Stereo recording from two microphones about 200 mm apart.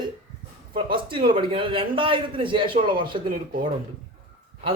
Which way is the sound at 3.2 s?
40° right (ahead or behind).